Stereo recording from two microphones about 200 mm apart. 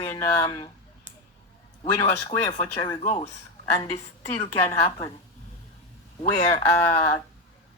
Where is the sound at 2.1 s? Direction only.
15° left (ahead or behind).